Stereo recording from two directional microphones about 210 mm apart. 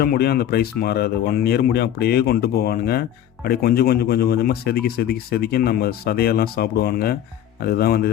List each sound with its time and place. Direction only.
0.0 s speech: 45° left (ahead or behind)